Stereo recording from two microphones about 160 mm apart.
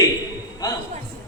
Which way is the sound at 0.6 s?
25° left (ahead or behind).